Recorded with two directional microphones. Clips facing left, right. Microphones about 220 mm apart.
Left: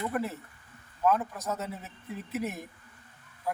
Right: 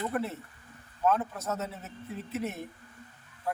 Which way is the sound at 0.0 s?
10° left (ahead or behind).